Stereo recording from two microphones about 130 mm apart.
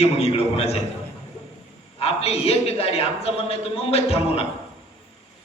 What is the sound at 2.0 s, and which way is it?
A man's voice, 50° left (ahead or behind).